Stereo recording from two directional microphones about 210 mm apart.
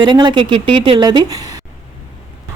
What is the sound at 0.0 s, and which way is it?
Speech, 20° right (ahead or behind).